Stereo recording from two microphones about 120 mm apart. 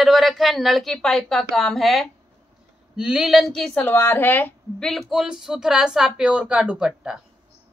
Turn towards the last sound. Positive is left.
turn(degrees=-5)  # may be behind; listen again after turning